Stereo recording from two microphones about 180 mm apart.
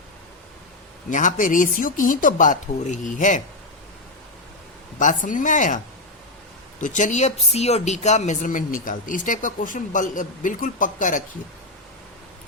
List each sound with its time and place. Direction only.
1.1 s speech: 45° left (ahead or behind)
4.9 s speech: 45° left (ahead or behind)